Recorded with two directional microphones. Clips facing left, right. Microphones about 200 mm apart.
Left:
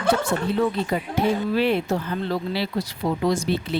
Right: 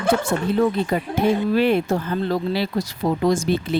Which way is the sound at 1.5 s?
50° right (ahead or behind).